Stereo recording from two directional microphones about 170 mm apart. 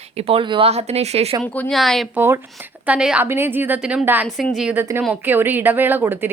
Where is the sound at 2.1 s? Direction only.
15° right (ahead or behind).